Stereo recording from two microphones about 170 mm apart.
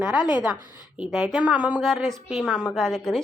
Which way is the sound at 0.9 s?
5° right (ahead or behind).